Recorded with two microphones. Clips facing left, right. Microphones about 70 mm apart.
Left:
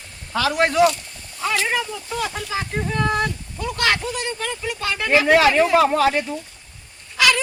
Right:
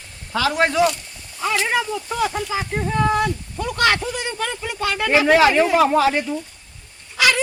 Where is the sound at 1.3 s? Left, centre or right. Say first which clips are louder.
Right 2 dB; centre.